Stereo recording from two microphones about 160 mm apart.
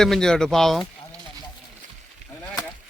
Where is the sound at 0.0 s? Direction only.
5° left (ahead or behind).